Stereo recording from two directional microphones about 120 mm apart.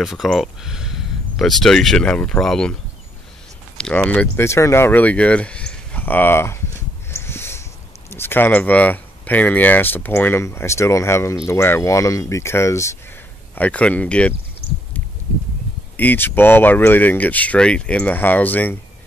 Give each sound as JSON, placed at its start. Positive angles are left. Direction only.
{"t": 0.0, "sound": "speech", "side_deg": 0}
{"t": 3.7, "sound": "speech", "side_deg": 10}
{"t": 7.1, "sound": "a sound", "side_deg": 20}
{"t": 8.1, "sound": "speech", "side_deg": 20}
{"t": 13.6, "sound": "speech", "side_deg": 10}
{"t": 16.0, "sound": "speech", "side_deg": 15}